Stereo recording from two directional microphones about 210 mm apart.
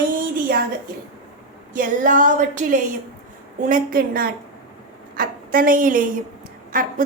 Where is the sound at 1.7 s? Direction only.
40° right (ahead or behind).